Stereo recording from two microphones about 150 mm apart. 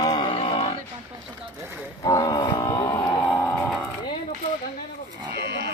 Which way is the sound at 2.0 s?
25° left (ahead or behind).